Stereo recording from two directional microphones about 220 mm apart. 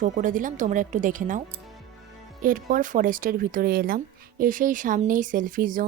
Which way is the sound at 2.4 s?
35° right (ahead or behind).